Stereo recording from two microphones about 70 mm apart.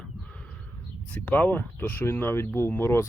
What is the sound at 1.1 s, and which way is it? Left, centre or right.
Speech, centre.